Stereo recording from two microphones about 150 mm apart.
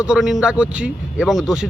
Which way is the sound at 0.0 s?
5° right (ahead or behind).